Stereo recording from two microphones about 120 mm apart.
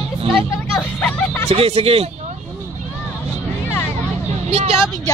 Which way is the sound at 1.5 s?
60° right (ahead or behind).